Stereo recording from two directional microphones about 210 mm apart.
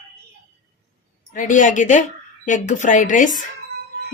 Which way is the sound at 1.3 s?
40° left (ahead or behind).